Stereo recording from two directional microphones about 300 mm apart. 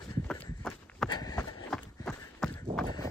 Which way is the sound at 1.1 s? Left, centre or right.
Centre.